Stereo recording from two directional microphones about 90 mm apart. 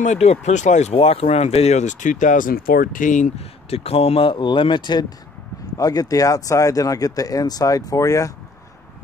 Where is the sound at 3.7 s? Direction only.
90° left; by 5.0 s 55° left (ahead or behind).